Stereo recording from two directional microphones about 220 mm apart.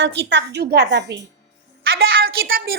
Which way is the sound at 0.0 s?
55° right (ahead or behind).